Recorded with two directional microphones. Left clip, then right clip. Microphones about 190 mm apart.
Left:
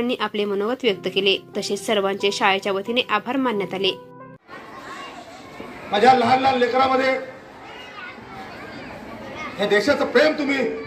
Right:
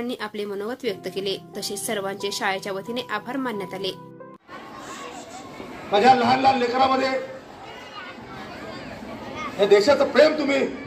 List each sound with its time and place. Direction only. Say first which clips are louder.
0.0 s speech: left 6 dB; 10° left (ahead or behind)
5.9 s a man's voice: left 1 dB; 40° left (ahead or behind)
9.4 s a man's voice: right 3 dB; 40° left (ahead or behind)